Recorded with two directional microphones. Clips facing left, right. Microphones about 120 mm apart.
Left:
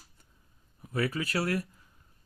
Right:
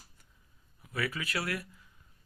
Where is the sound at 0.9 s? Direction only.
35° left (ahead or behind).